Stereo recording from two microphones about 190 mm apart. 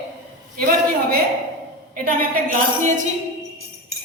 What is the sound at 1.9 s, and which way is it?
A woman's voice, 50° right (ahead or behind).